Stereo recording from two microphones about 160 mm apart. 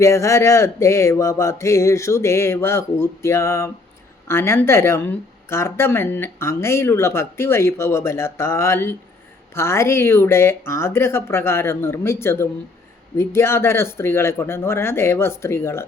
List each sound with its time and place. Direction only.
0.0 s speech: 20° left (ahead or behind)